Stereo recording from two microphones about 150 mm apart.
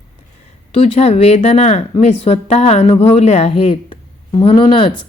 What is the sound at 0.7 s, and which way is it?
A woman's voice, 45° left (ahead or behind).